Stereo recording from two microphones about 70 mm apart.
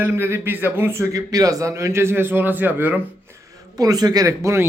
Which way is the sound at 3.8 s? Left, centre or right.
Right.